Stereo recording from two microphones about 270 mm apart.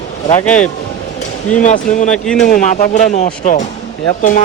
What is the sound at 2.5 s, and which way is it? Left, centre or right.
Speech, left.